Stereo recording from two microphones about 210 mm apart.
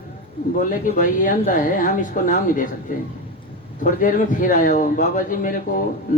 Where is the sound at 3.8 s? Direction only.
40° left (ahead or behind).